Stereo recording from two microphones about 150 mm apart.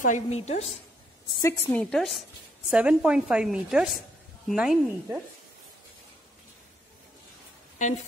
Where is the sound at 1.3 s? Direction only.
20° left (ahead or behind).